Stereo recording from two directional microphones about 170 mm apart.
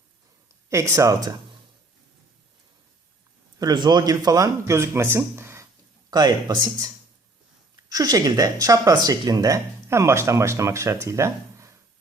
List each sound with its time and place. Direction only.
0.7 s speech: 15° right (ahead or behind)
3.6 s speech: 25° right (ahead or behind)